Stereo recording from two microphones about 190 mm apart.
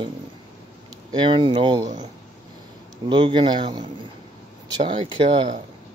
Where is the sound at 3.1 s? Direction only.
25° right (ahead or behind).